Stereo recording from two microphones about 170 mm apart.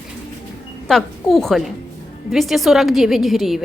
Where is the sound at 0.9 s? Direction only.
Centre (ahead or behind).